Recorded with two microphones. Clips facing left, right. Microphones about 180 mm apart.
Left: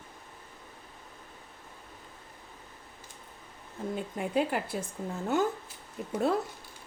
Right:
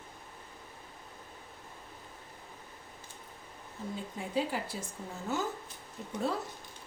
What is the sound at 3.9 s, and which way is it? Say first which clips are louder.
Speech: left 4 dB; 60° left (ahead or behind).